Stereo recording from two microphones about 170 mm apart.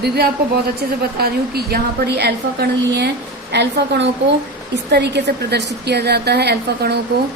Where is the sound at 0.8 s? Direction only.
65° right (ahead or behind).